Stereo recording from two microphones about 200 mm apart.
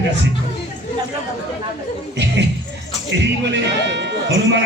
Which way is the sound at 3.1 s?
60° right (ahead or behind).